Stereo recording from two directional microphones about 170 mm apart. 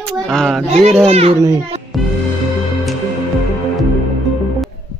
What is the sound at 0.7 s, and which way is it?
Speech, 35° right (ahead or behind).